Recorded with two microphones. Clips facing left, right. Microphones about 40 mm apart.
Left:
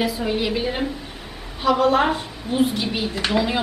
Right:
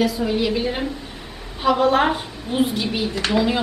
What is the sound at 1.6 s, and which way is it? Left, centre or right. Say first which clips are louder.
A woman's voice: right 1 dB; centre.